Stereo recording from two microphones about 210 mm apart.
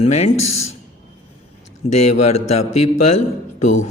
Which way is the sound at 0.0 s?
30° left (ahead or behind).